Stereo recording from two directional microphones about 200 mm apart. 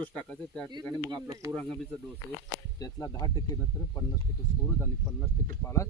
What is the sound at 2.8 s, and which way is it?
Speech, 20° left (ahead or behind).